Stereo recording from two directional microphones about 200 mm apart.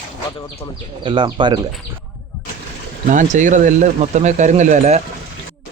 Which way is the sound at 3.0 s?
40° right (ahead or behind).